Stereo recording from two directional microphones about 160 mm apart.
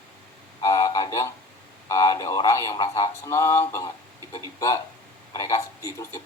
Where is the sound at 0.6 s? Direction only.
20° left (ahead or behind).